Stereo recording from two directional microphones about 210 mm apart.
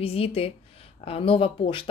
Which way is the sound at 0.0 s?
30° left (ahead or behind).